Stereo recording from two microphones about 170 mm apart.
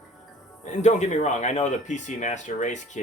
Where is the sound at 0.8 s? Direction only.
45° left (ahead or behind).